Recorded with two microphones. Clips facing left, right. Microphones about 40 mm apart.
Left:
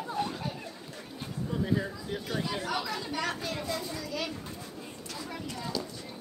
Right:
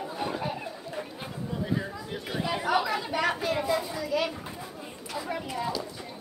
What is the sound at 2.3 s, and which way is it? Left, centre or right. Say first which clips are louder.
Speech: right 6 dB; centre.